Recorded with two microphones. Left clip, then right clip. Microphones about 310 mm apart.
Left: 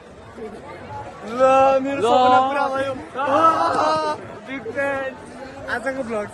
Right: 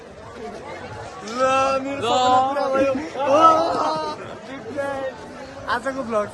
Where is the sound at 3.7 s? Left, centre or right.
Left.